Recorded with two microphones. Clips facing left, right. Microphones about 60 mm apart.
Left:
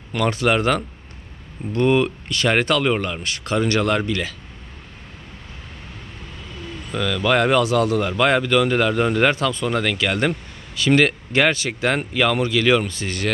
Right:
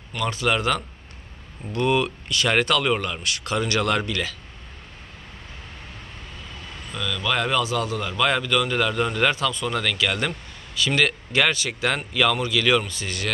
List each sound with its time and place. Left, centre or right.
0.3 s a man's voice: left
2.5 s a man's voice: left
6.9 s speech: left
8.1 s a man's voice: left